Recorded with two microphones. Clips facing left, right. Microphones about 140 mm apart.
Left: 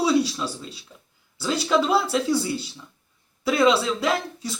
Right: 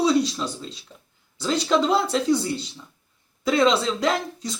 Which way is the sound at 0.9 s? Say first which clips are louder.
Right 1 dB; 20° right (ahead or behind).